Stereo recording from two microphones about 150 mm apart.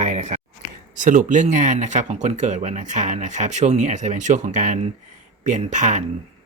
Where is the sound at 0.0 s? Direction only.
50° right (ahead or behind).